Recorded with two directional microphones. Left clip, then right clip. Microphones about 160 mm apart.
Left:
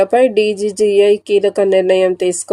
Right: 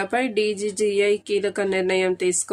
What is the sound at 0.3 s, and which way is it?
Speech, 15° left (ahead or behind).